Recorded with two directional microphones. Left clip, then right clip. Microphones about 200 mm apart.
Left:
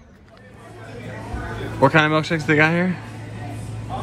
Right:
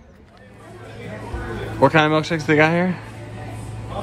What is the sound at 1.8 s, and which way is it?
Speech, 5° right (ahead or behind).